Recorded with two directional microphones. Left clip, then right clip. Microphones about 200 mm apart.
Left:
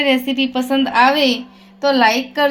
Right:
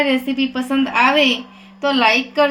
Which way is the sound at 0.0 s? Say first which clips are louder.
Left 2 dB; 45° left (ahead or behind).